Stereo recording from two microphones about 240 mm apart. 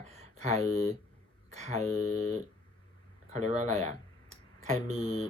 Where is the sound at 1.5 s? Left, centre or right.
Right.